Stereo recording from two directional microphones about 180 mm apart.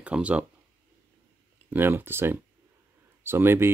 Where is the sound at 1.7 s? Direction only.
10° right (ahead or behind).